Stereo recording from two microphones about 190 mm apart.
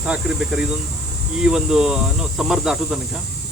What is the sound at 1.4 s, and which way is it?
Speech, 5° right (ahead or behind).